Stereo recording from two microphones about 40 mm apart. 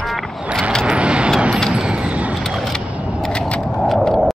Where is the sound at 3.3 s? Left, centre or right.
Left.